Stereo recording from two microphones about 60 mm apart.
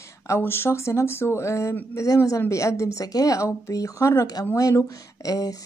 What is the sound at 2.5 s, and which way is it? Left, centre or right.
A woman's voice, left.